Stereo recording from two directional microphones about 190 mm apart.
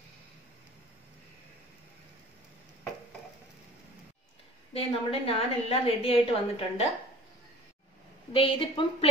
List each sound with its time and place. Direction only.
4.7 s a woman's voice: 30° left (ahead or behind)
8.3 s speech: 25° left (ahead or behind)